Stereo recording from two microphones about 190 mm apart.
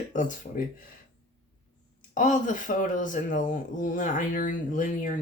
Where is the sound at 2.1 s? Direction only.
40° left (ahead or behind).